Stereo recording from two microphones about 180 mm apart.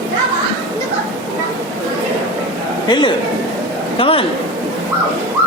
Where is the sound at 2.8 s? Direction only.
25° left (ahead or behind).